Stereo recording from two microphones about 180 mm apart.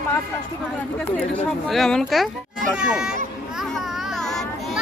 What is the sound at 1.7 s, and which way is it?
Speech, centre (ahead or behind).